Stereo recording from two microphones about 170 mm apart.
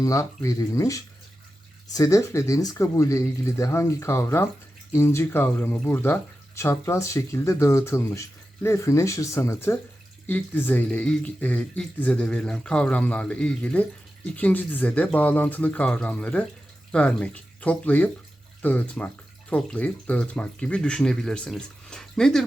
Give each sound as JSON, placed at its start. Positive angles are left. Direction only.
{"t": 0.0, "sound": "speech", "side_deg": 20}